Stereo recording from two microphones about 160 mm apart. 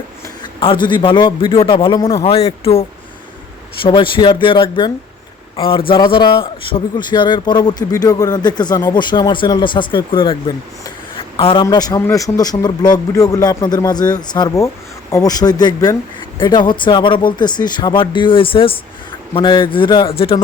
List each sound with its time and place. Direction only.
0.6 s a man's voice: 30° left (ahead or behind)
2.2 s a man's voice: 40° left (ahead or behind)
3.8 s a man's voice: 30° left (ahead or behind)
11.1 s a sound: 35° left (ahead or behind)
11.6 s a man's voice: 25° left (ahead or behind)